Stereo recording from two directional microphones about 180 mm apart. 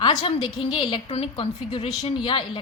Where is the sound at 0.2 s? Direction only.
30° left (ahead or behind).